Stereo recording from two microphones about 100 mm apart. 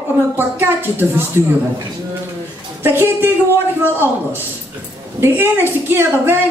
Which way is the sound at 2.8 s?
20° right (ahead or behind).